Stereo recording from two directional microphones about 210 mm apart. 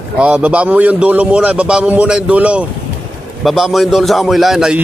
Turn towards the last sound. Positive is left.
turn(degrees=-5)  # may be behind; listen again after turning